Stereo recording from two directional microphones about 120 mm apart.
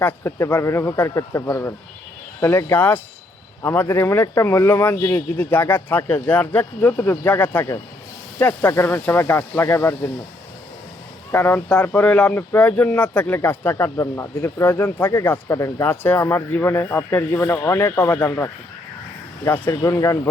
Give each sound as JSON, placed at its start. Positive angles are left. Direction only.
{"t": 0.0, "sound": "speech", "side_deg": 20}
{"t": 11.3, "sound": "speech", "side_deg": 15}
{"t": 13.9, "sound": "speech", "side_deg": 30}
{"t": 14.4, "sound": "speech", "side_deg": 15}
{"t": 19.7, "sound": "speech", "side_deg": 25}